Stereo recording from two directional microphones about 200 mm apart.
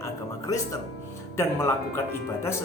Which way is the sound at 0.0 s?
15° left (ahead or behind).